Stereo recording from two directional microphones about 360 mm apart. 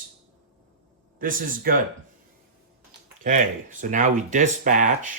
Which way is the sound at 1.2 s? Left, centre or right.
Right.